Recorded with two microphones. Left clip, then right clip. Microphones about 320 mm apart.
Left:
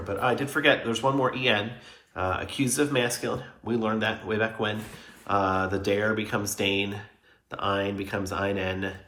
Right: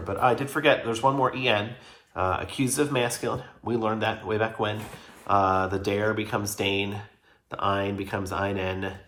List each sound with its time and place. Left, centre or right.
0.0 s speech: centre